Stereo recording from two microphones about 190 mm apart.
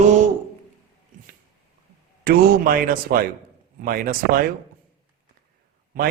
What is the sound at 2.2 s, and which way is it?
A man's voice, 50° right (ahead or behind).